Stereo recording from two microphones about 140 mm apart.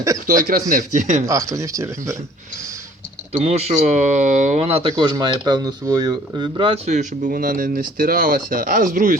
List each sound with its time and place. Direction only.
0.3 s speech: 85° right
0.7 s speech: 75° right (ahead or behind)
1.3 s speech: 20° right (ahead or behind)
3.3 s speech: 50° right (ahead or behind)
4.8 s speech: 30° right (ahead or behind)
6.8 s speech: 60° right (ahead or behind)